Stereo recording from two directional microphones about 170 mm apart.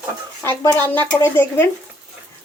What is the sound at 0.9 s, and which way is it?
Speech, 10° left (ahead or behind).